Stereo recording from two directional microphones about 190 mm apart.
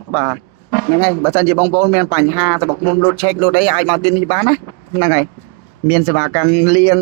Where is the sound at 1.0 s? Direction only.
20° right (ahead or behind).